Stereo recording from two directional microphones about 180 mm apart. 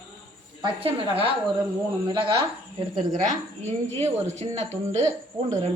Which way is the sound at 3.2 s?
40° right (ahead or behind).